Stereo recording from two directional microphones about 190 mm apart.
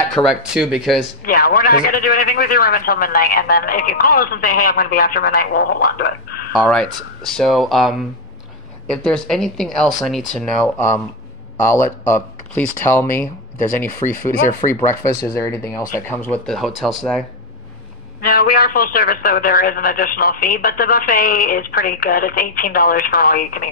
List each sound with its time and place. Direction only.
0.1 s speech: 5° right (ahead or behind)
1.2 s a man's voice: 50° left (ahead or behind)
6.5 s speech: centre (ahead or behind)
15.0 s speech: 15° left (ahead or behind)
16.4 s speech: centre (ahead or behind)
18.2 s a man's voice: 50° left (ahead or behind)